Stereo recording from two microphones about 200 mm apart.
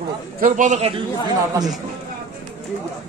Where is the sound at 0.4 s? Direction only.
40° right (ahead or behind).